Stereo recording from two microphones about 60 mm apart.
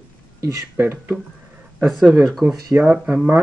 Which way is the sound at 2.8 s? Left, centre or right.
Right.